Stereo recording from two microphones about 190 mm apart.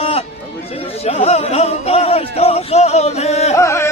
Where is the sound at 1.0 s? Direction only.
35° left (ahead or behind).